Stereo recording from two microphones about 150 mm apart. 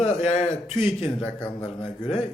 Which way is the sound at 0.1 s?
50° left (ahead or behind).